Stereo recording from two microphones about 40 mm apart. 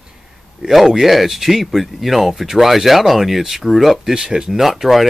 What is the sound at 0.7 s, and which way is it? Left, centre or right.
Speech, centre.